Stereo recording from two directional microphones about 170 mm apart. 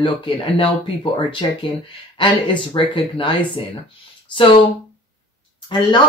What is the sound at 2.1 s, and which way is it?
Speech, 30° left (ahead or behind).